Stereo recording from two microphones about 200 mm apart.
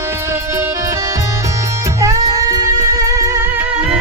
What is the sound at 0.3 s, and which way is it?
Music, 15° right (ahead or behind).